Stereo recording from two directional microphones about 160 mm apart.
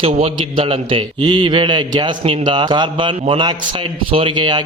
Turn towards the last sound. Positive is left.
turn(degrees=-30)  # may be behind; listen again after turning